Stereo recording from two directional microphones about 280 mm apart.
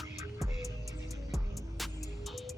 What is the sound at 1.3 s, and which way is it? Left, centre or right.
Music, centre.